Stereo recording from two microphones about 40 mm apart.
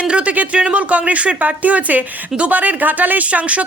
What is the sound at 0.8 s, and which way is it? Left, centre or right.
Speech, right.